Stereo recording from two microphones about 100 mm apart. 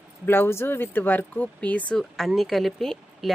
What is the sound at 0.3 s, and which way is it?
Speech, 20° left (ahead or behind).